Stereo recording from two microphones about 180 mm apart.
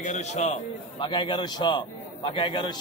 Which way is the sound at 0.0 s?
45° left (ahead or behind).